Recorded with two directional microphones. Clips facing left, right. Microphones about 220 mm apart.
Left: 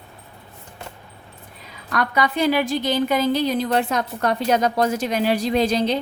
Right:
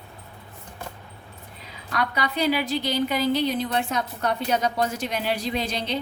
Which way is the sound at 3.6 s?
80° left.